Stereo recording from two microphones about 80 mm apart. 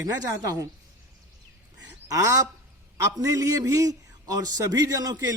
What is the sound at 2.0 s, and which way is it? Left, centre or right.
Speech, right.